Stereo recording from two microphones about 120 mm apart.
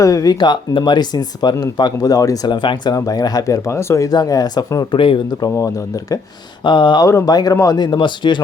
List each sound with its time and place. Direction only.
0.0 s speech: 30° left (ahead or behind)
5.5 s speech: 25° left (ahead or behind)
6.7 s speech: 40° left (ahead or behind)
7.1 s speech: 30° left (ahead or behind)